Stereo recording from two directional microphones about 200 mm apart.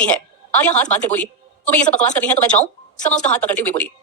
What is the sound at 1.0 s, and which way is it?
Speech, 10° left (ahead or behind).